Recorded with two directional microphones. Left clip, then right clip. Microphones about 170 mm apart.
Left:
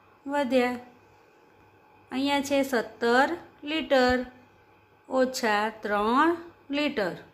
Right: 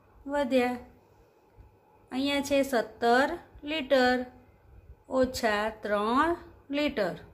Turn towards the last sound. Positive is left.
turn(degrees=10)  # may be behind; listen again after turning